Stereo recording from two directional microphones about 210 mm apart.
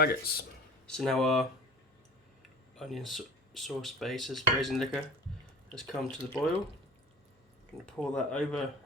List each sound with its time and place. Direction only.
0.0 s speech: 45° left (ahead or behind)
0.9 s speech: 5° left (ahead or behind)
2.7 s speech: centre (ahead or behind)
7.9 s speech: 5° left (ahead or behind)